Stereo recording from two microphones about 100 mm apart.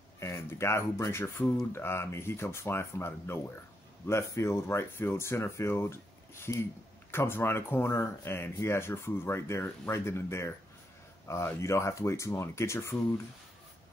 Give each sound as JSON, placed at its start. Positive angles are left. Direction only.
{"t": 0.2, "sound": "speech", "side_deg": 30}